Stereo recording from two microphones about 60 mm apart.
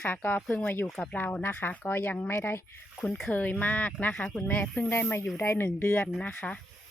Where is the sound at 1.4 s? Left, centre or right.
Left.